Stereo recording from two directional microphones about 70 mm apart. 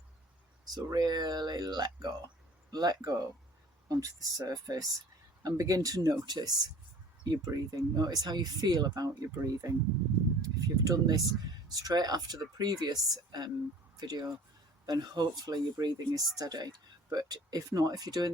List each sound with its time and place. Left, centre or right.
0.7 s speech: right
7.3 s speech: right
10.4 s speech: right